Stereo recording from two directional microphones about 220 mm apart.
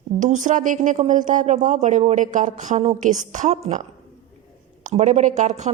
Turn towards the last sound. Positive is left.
turn(degrees=-30)  # may be behind; listen again after turning